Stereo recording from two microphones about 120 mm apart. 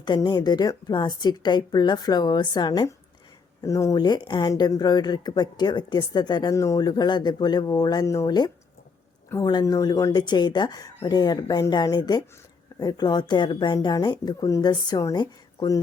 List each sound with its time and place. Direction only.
0.0 s speech: 35° left (ahead or behind)